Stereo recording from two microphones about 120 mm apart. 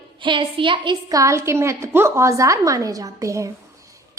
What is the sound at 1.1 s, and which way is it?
A woman's voice, 25° right (ahead or behind).